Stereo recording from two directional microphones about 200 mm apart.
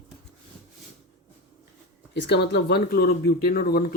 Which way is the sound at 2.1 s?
60° left (ahead or behind).